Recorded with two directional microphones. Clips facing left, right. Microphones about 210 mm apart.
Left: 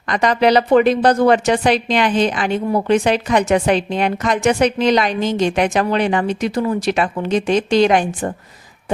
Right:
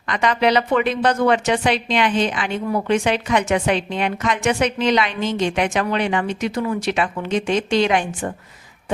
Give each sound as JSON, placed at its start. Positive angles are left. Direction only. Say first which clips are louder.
{"t": 0.1, "sound": "a woman's voice", "louder": "left 4 dB", "side_deg": 40}